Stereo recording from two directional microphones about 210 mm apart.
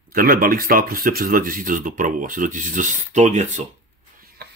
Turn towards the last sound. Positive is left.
turn(degrees=-50)  # may be behind; listen again after turning